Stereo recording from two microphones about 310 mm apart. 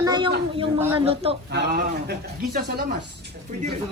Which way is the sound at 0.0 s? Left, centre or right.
Centre.